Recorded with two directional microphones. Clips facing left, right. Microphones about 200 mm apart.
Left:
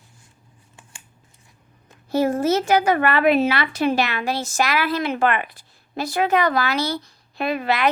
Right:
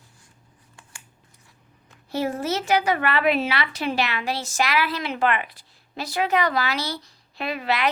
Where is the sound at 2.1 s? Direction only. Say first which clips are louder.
Left 6 dB; 45° left (ahead or behind).